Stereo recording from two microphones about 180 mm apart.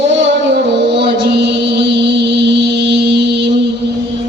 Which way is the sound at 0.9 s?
70° right (ahead or behind).